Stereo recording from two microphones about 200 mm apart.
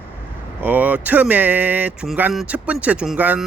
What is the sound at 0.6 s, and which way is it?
Speech, 10° right (ahead or behind).